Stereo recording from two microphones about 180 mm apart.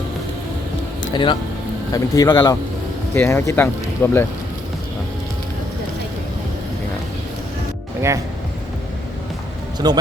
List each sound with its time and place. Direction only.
1.1 s speech: 25° left (ahead or behind)
9.7 s speech: 20° right (ahead or behind)